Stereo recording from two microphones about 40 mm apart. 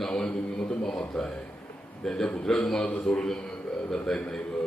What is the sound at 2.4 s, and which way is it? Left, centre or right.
Speech, centre.